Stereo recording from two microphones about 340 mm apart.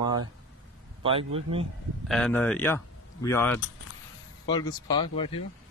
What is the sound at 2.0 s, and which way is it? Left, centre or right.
A man's voice, centre.